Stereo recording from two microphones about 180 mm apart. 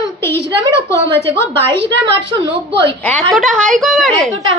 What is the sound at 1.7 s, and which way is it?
Speech, 75° right (ahead or behind).